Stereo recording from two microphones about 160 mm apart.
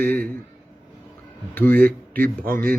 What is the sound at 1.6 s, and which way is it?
Speech, 10° left (ahead or behind).